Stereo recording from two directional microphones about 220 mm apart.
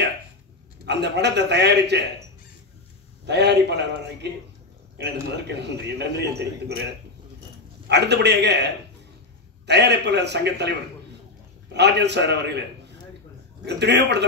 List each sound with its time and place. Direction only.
0.8 s a man's voice: 50° right (ahead or behind)
3.3 s a man's voice: 50° right (ahead or behind)
7.9 s a man's voice: 50° right (ahead or behind)
11.7 s a man's voice: 50° right (ahead or behind)
13.7 s a man's voice: 50° right (ahead or behind)